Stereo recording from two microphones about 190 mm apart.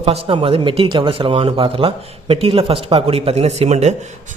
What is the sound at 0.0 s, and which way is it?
Speech, 30° right (ahead or behind).